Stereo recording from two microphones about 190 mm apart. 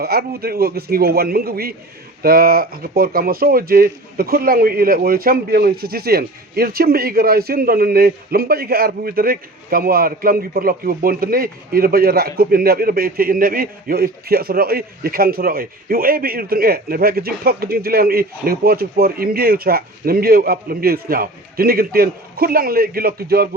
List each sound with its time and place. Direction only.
0.0 s a man's voice: 55° right (ahead or behind)